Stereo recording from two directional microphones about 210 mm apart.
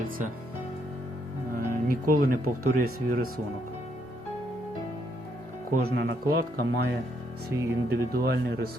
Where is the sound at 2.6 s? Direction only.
90° right.